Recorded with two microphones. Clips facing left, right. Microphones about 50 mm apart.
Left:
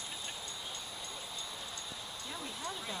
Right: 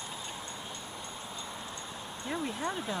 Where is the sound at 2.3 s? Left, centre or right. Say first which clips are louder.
Right 9 dB; right.